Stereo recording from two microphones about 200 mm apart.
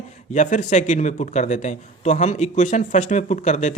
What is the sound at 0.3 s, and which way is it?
A man's voice, 35° left (ahead or behind).